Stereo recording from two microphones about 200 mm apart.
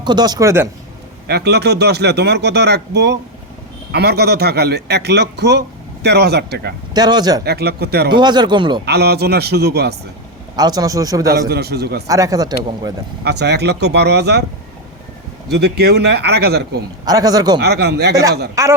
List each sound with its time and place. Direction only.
0.0 s a man's voice: 20° right (ahead or behind)
1.3 s a man's voice: 55° right (ahead or behind)
6.9 s speech: 20° right (ahead or behind)
7.4 s speech: 55° right (ahead or behind)
8.1 s speech: 20° right (ahead or behind)
8.8 s a man's voice: 55° right (ahead or behind)
10.6 s a man's voice: 20° right (ahead or behind)
11.3 s speech: 50° right (ahead or behind)
12.0 s a man's voice: 15° right (ahead or behind)
13.2 s a man's voice: 55° right (ahead or behind)
15.5 s speech: 55° right (ahead or behind)
17.1 s speech: 20° right (ahead or behind)
17.6 s speech: 55° right (ahead or behind)
18.1 s a man's voice: 15° right (ahead or behind)